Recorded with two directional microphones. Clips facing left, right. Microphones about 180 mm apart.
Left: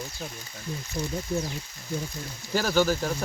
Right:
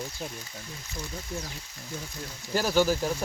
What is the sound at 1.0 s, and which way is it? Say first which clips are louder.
Speech: left 7 dB; 15° left (ahead or behind).